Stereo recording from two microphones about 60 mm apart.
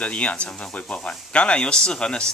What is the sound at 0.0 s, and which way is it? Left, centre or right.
Speech, left.